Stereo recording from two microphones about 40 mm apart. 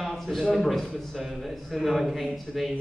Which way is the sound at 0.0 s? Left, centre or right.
Centre.